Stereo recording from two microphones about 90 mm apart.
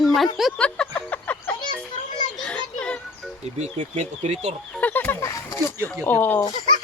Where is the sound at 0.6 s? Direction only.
15° left (ahead or behind).